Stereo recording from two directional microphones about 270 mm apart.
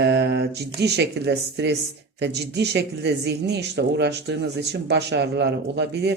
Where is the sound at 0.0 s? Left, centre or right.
Right.